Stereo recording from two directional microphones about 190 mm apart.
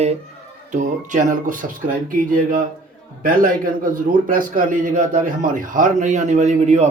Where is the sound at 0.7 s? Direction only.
40° right (ahead or behind).